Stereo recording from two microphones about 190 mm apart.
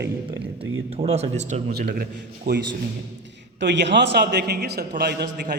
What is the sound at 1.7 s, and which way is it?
Speech, 55° right (ahead or behind).